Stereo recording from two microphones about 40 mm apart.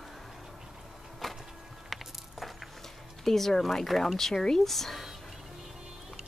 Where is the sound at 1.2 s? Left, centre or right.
Centre.